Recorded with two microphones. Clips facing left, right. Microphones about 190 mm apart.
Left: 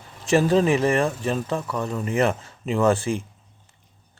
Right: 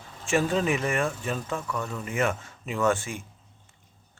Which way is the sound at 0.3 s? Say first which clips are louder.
Left 6 dB; 35° left (ahead or behind).